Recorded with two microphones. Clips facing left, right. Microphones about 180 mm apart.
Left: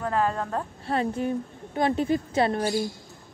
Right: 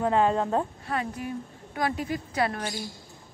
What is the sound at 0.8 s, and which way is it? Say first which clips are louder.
A woman's voice: left 5 dB; 30° left (ahead or behind).